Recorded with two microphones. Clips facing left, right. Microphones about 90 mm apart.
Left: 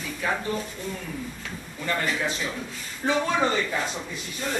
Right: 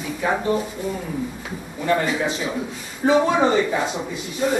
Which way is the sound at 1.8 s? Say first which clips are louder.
Right 6 dB; 20° right (ahead or behind).